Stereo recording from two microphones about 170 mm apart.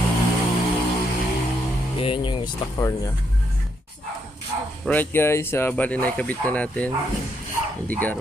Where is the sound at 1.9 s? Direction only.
30° left (ahead or behind).